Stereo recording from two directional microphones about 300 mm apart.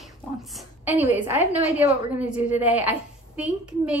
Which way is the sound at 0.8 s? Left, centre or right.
Centre.